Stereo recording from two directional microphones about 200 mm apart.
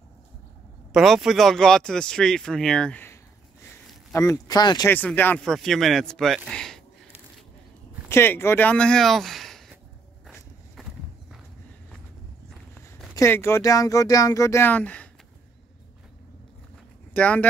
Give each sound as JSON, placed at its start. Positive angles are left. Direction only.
{"t": 0.9, "sound": "speech", "side_deg": 0}
{"t": 4.9, "sound": "speech", "side_deg": 10}
{"t": 6.5, "sound": "a sound", "side_deg": 0}
{"t": 8.1, "sound": "speech", "side_deg": 10}
{"t": 13.1, "sound": "speech", "side_deg": 15}
{"t": 17.1, "sound": "speech", "side_deg": 5}